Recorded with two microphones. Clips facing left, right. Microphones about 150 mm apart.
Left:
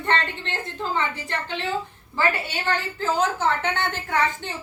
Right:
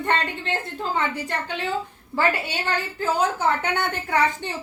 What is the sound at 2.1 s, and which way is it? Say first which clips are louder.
Speech: right 1 dB; 10° right (ahead or behind).